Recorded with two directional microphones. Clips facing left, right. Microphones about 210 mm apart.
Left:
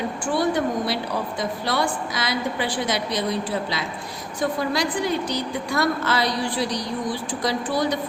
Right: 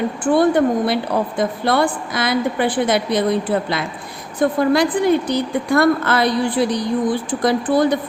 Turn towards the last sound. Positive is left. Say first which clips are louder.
# right 7 dB
turn(degrees=-55)  # may be behind; listen again after turning